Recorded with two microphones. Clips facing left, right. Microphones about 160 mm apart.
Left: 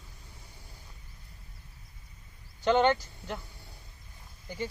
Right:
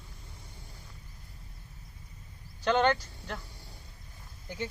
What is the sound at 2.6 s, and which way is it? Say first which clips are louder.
Speech: left 2 dB; 20° left (ahead or behind).